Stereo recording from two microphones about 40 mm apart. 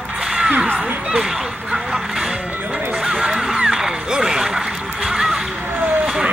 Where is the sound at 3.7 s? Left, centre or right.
Centre.